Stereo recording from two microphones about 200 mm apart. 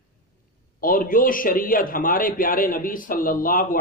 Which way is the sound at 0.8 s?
45° left (ahead or behind).